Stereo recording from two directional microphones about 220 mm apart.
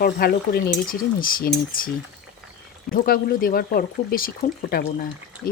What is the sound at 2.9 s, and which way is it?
Speech, 40° left (ahead or behind).